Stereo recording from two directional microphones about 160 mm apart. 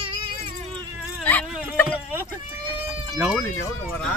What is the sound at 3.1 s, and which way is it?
Speech, 5° right (ahead or behind).